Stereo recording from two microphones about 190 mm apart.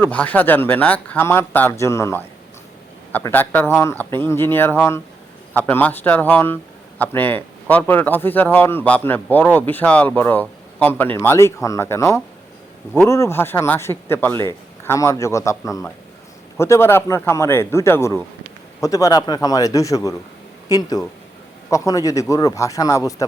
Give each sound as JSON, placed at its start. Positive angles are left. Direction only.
{"t": 0.0, "sound": "speech", "side_deg": 10}